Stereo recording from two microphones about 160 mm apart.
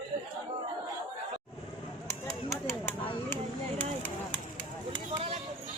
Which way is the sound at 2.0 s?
20° left (ahead or behind).